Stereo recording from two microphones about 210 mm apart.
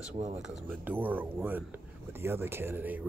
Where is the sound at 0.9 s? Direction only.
10° right (ahead or behind).